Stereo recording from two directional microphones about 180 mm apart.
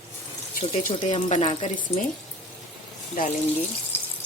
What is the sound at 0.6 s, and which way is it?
Speech, 45° left (ahead or behind).